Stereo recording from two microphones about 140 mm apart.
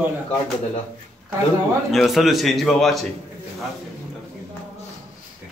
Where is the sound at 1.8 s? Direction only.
Centre (ahead or behind).